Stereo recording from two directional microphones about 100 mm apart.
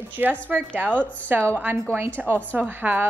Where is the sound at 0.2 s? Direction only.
20° right (ahead or behind).